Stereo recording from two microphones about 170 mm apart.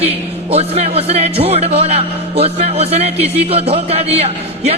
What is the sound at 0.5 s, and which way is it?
Speech, 35° right (ahead or behind).